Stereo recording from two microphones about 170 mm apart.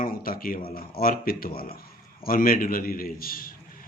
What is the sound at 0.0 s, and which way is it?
A man's voice, 55° left (ahead or behind).